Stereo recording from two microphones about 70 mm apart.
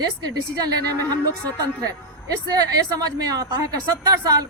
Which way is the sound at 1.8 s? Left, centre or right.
Right.